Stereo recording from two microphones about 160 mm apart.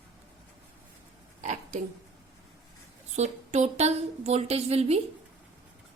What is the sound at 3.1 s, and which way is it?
A woman's voice, 45° right (ahead or behind).